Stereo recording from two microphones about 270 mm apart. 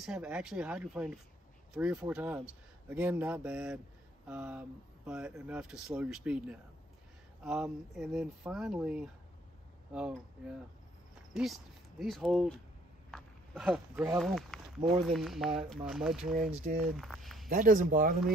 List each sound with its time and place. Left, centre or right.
0.0 s speech: centre
12.0 s speech: centre
17.5 s speech: right